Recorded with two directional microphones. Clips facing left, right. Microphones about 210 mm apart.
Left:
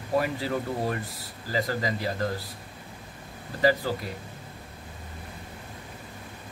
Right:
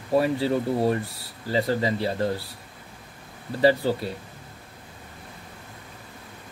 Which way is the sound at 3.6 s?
30° right (ahead or behind).